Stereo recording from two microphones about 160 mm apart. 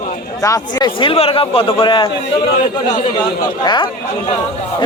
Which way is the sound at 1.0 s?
35° left (ahead or behind).